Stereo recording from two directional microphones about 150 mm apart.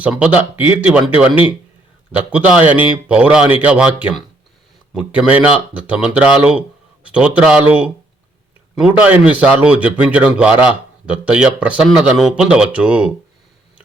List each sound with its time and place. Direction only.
0.0 s a man's voice: 5° right (ahead or behind)